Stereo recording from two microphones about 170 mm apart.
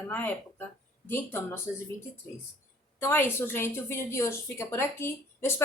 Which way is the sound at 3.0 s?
15° left (ahead or behind).